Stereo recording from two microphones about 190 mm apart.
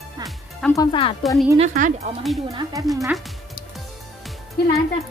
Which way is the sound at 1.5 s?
40° right (ahead or behind).